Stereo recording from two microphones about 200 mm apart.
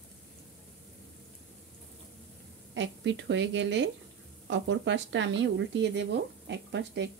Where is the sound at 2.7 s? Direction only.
65° right (ahead or behind).